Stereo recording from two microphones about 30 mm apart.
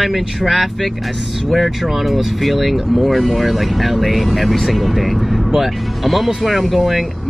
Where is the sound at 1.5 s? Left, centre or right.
Centre.